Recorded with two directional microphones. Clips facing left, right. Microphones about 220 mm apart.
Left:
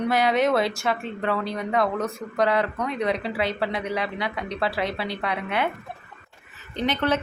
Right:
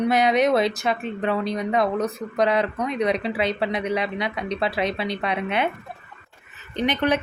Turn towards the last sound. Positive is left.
turn(degrees=-15)  # may be behind; listen again after turning